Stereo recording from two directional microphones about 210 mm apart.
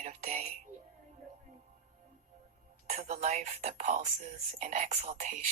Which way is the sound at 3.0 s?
35° right (ahead or behind).